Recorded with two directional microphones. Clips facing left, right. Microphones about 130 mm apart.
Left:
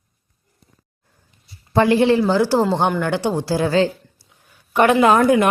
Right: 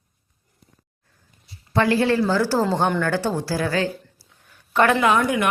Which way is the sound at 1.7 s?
25° left (ahead or behind).